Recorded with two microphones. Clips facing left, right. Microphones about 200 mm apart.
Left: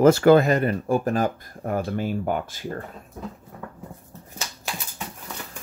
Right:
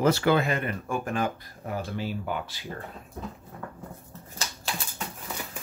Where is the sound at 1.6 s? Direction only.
50° left (ahead or behind).